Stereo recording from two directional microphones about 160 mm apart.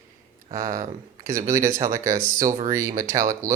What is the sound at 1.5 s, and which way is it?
Speech, 20° right (ahead or behind).